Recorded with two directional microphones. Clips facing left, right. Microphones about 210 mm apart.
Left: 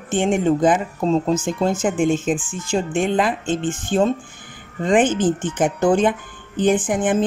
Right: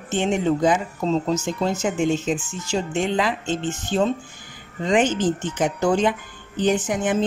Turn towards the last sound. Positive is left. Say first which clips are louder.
# left 3 dB
turn(degrees=50)  # may be behind; listen again after turning